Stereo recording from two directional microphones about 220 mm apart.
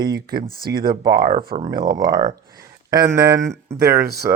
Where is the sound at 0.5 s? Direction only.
45° right (ahead or behind).